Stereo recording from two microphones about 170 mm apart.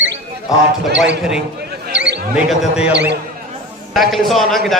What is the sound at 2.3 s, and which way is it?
Speech, 5° right (ahead or behind).